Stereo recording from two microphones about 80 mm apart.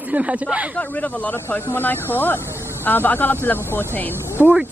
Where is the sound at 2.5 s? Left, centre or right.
Right.